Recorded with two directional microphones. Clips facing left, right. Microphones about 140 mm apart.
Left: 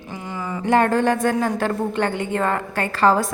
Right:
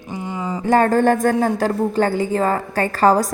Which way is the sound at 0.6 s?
40° right (ahead or behind).